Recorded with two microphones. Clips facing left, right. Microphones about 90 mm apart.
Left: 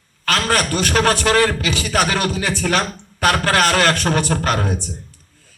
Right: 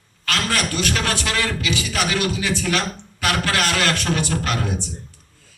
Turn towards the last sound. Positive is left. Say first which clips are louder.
# left 4 dB
turn(degrees=45)  # may be behind; listen again after turning